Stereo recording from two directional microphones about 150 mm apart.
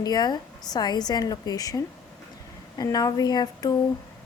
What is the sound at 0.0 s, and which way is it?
A woman's voice, 25° left (ahead or behind).